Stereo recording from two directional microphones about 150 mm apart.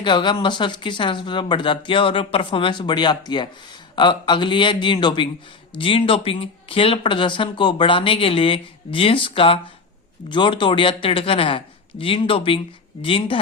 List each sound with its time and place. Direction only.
0.0 s speech: 30° left (ahead or behind)